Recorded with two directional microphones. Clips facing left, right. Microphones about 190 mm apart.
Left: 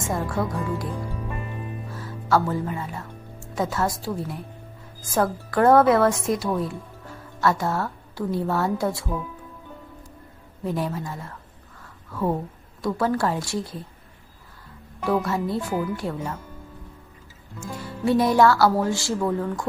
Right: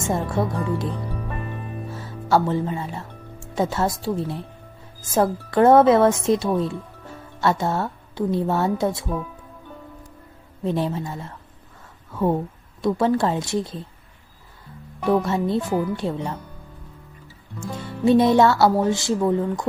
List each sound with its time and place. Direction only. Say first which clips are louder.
0.0 s speech: right 3 dB; 25° right (ahead or behind)
2.3 s speech: right 2 dB; 25° right (ahead or behind)
10.6 s speech: right 3 dB; 25° right (ahead or behind)
12.8 s speech: right 3 dB; 20° right (ahead or behind)
15.0 s speech: right 3 dB; 25° right (ahead or behind)
17.6 s speech: right 4 dB; 25° right (ahead or behind)